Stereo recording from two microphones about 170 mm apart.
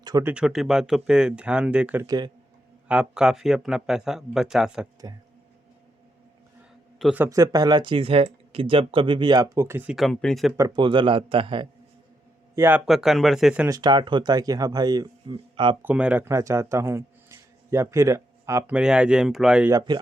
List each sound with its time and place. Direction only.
0.0 s a sound: 25° right (ahead or behind)
0.3 s speech: 5° right (ahead or behind)
2.0 s speech: 25° right (ahead or behind)
2.8 s speech: 5° right (ahead or behind)
7.0 s a man's voice: 5° right (ahead or behind)
7.3 s speech: 20° right (ahead or behind)
9.9 s speech: centre (ahead or behind)
10.6 s speech: 25° right (ahead or behind)
12.5 s speech: 10° right (ahead or behind)
12.8 s speech: centre (ahead or behind)
13.7 s speech: 25° right (ahead or behind)
15.8 s speech: 10° right (ahead or behind)
18.8 s speech: 5° right (ahead or behind)
19.7 s speech: 25° right (ahead or behind)